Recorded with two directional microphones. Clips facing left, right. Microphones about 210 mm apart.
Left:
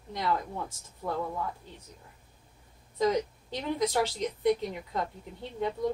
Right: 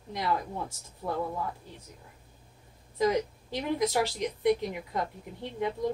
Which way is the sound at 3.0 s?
10° right (ahead or behind).